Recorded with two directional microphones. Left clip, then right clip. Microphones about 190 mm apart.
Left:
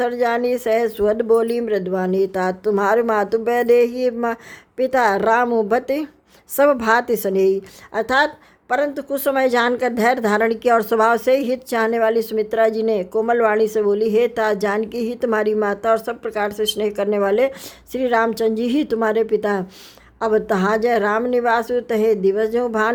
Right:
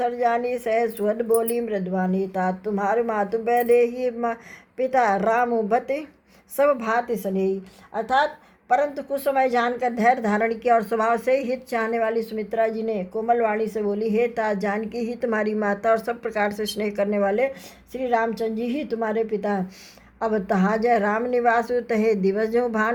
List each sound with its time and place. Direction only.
0.0 s a woman's voice: 40° left (ahead or behind)
8.7 s a woman's voice: 40° left (ahead or behind)